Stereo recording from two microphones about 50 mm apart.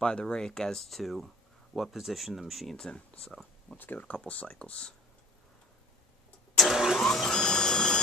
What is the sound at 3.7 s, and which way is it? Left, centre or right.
Speech, left.